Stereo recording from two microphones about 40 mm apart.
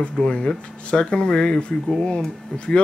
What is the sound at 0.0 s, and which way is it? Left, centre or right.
Speech, left.